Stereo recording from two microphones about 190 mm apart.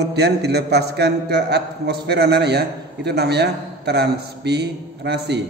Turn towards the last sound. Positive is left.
turn(degrees=-60)  # may be behind; listen again after turning